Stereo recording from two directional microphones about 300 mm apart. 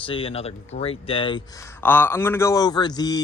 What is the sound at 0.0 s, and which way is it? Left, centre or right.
Speech, centre.